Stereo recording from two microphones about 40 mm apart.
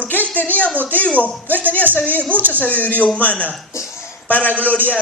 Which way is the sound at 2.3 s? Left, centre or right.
Right.